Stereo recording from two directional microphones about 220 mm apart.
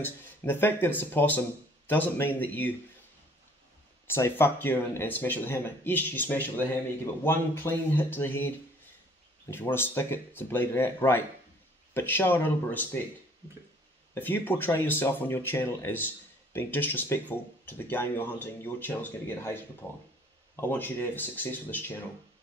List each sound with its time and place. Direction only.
0.0 s speech: 10° left (ahead or behind)
4.1 s speech: 10° left (ahead or behind)
14.1 s speech: 10° left (ahead or behind)
20.7 s speech: 10° left (ahead or behind)